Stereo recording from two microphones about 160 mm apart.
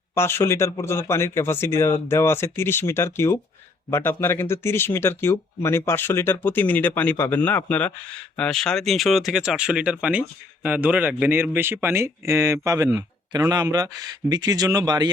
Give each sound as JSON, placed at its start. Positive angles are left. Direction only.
{"t": 0.1, "sound": "speech", "side_deg": 15}